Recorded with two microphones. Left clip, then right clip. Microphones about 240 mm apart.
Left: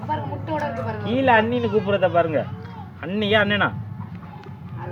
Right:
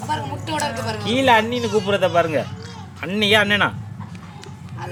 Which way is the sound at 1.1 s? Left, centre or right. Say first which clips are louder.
Right 2 dB; centre.